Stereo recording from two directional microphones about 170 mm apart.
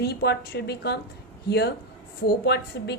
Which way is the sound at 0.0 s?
70° left (ahead or behind).